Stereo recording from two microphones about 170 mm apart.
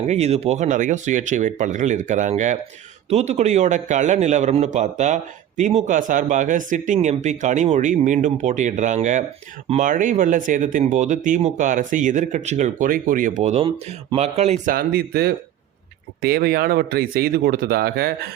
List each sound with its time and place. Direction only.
0.1 s a man's voice: 40° right (ahead or behind); by 18.1 s 65° right (ahead or behind)